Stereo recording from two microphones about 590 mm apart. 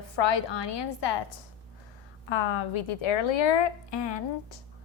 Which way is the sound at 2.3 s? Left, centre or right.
Left.